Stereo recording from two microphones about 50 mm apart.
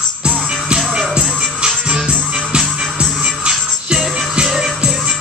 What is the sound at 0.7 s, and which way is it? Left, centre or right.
Music, centre.